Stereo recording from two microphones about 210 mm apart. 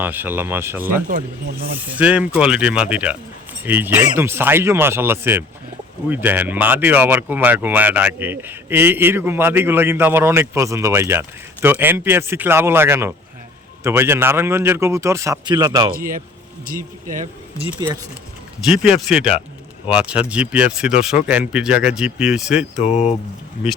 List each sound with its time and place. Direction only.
0.0 s speech: 10° right (ahead or behind)
1.0 s speech: 40° right (ahead or behind)
1.9 s speech: 5° right (ahead or behind)
16.6 s speech: 40° right (ahead or behind)
18.6 s speech: 5° right (ahead or behind)
22.8 s speech: 30° left (ahead or behind)